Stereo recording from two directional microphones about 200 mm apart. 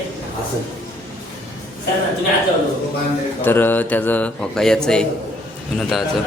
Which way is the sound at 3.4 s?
10° left (ahead or behind).